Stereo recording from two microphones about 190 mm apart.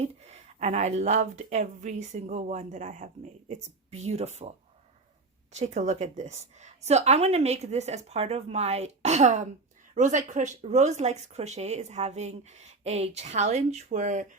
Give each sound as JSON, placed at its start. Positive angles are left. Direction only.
{"t": 0.0, "sound": "speech", "side_deg": -35}
{"t": 5.5, "sound": "speech", "side_deg": -40}